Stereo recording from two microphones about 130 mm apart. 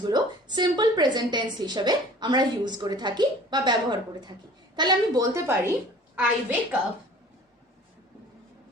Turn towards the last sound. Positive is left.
turn(degrees=-10)  # may be behind; listen again after turning